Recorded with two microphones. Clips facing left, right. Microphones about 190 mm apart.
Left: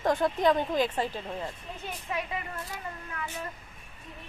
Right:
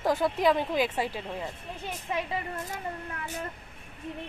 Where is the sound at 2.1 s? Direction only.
25° right (ahead or behind).